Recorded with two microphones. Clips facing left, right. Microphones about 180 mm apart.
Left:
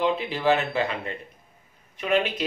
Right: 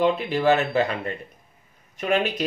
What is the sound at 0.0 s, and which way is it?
Speech, 45° right (ahead or behind).